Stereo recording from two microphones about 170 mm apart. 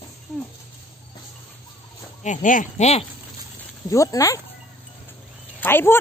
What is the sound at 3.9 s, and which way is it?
Speech, 20° left (ahead or behind).